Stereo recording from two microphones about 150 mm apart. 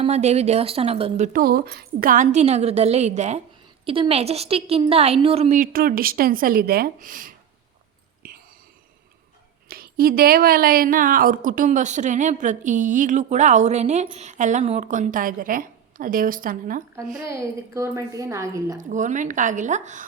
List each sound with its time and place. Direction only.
0.0 s a woman's voice: 45° right (ahead or behind)
1.3 s a woman's voice: 85° right; by 3.4 s 50° right (ahead or behind)
3.8 s a woman's voice: 35° right (ahead or behind)
5.5 s speech: 75° right (ahead or behind)
9.6 s a woman's voice: 85° right; by 16.8 s 70° right (ahead or behind)
17.2 s a woman's voice: 20° right (ahead or behind)
18.8 s a woman's voice: 55° right (ahead or behind)